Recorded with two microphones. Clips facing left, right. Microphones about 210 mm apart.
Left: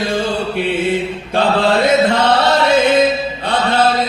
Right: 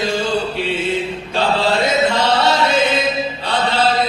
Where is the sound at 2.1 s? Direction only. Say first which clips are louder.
Left 2 dB; 55° left (ahead or behind).